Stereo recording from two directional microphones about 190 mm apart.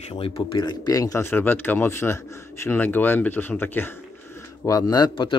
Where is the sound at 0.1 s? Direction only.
30° left (ahead or behind).